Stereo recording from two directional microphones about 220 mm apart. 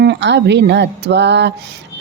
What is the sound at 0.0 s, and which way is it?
Speech, 50° right (ahead or behind).